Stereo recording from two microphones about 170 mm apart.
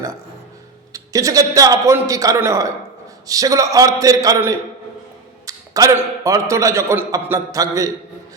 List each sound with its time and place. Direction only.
0.9 s a man's voice: 20° right (ahead or behind)